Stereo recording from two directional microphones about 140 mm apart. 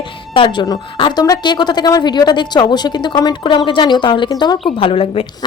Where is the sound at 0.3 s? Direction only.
35° left (ahead or behind).